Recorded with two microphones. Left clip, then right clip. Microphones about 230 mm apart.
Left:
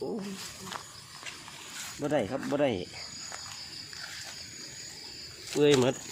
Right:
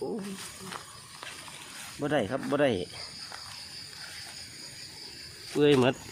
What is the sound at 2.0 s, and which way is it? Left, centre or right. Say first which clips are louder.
Speech: right 1 dB; centre.